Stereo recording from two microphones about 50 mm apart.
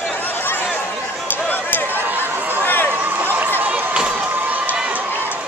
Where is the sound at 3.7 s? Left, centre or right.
Right.